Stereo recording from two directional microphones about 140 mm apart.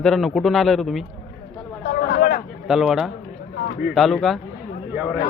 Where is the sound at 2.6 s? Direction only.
5° right (ahead or behind).